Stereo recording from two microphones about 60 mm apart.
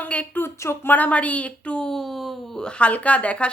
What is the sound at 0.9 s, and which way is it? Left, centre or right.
A woman's voice, left.